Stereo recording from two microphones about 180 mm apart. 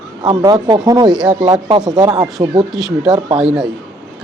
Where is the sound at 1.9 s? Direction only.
25° right (ahead or behind).